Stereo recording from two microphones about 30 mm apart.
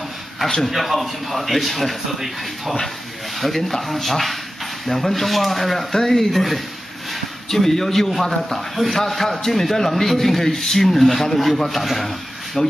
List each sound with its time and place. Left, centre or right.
0.7 s a man's voice: centre
5.9 s a man's voice: centre
6.3 s a man's voice: centre
12.6 s speech: left